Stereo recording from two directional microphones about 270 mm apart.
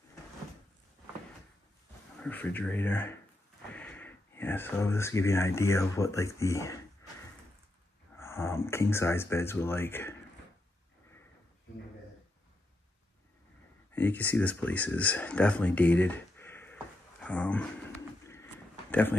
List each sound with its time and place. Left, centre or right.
2.2 s speech: centre
8.2 s speech: centre
13.9 s speech: centre
16.7 s dog: centre
18.2 s a sound: centre